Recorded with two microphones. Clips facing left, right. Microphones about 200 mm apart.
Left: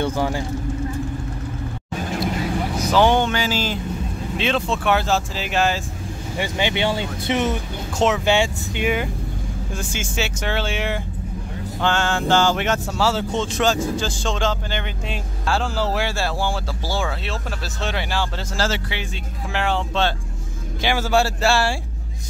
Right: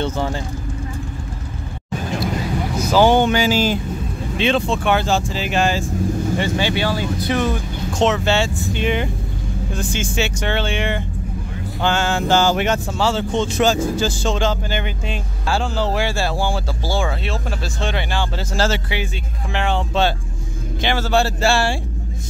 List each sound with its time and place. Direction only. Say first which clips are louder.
0.0 s a sound: even; 10° left (ahead or behind)
2.8 s a sound: right 3 dB; 5° right (ahead or behind)
4.4 s speech: right 4 dB; centre (ahead or behind)
6.3 s speech: right 3 dB; 15° left (ahead or behind)
19.5 s speech: right 1 dB; 5° left (ahead or behind)
20.8 s speech: right 1 dB; 10° left (ahead or behind)